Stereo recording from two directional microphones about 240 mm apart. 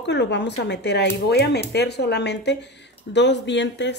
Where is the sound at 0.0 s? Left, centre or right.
Left.